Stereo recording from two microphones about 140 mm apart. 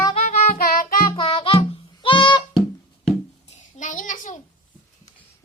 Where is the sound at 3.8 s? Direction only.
65° left (ahead or behind).